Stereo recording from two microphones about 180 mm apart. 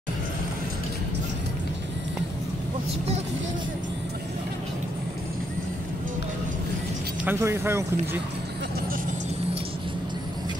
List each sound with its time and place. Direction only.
7.2 s speech: 15° right (ahead or behind)